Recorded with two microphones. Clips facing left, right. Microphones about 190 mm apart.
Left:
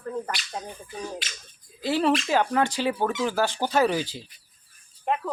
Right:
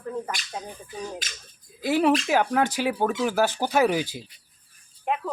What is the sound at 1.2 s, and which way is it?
Speech, 45° right (ahead or behind).